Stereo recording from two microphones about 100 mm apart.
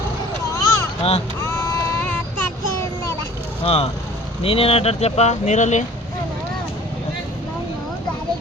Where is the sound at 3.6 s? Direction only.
80° left.